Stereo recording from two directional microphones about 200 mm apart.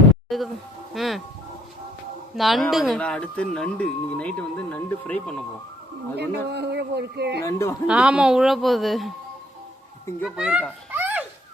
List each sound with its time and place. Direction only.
0.3 s speech: centre (ahead or behind)
2.3 s speech: centre (ahead or behind)
6.1 s speech: 55° right (ahead or behind)
7.4 s speech: 15° left (ahead or behind)
7.9 s speech: 5° right (ahead or behind)
10.2 s a child's voice: 5° right (ahead or behind)